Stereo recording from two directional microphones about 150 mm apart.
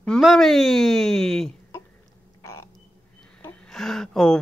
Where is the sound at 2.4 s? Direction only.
20° left (ahead or behind).